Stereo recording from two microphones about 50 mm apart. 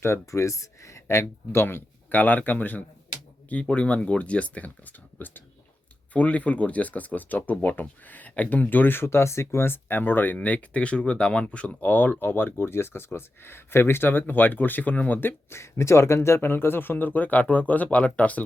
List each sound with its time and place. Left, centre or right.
0.3 s speech: left
1.6 s speech: left
3.7 s speech: left
9.0 s speech: left
10.3 s speech: left
15.2 s speech: left
15.5 s speech: left